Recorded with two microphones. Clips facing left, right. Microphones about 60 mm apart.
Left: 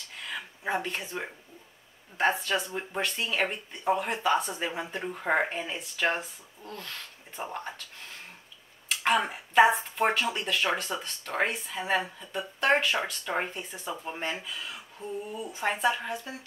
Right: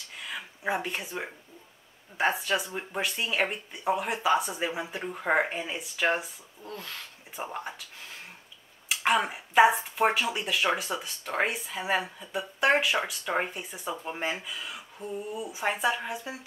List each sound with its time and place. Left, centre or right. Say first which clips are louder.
0.2 s a sound: right 1 dB; centre
2.1 s speech: even; centre
8.8 s speech: even; centre